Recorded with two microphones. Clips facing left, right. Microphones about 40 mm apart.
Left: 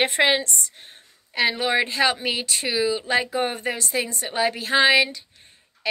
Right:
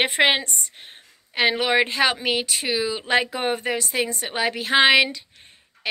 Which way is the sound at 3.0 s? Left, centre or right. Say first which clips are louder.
Right 1 dB; right.